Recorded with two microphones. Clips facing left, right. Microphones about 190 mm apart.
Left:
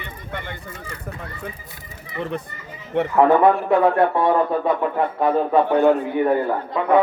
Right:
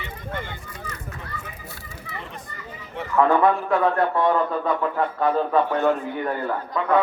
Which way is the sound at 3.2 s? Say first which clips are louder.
Left 3 dB; 30° left (ahead or behind).